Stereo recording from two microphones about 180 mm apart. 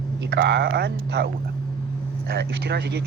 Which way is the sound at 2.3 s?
65° right (ahead or behind).